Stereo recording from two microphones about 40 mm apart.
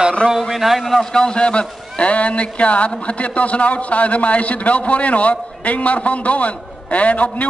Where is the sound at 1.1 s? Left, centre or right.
Left.